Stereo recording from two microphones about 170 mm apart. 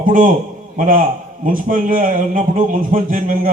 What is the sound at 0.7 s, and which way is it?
A man's voice, 50° right (ahead or behind).